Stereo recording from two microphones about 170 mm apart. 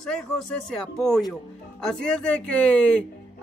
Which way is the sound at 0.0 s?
5° left (ahead or behind).